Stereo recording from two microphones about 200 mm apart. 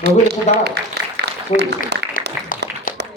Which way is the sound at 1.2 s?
60° right (ahead or behind).